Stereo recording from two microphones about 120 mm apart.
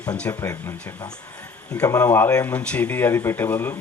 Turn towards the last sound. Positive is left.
turn(degrees=20)  # may be behind; listen again after turning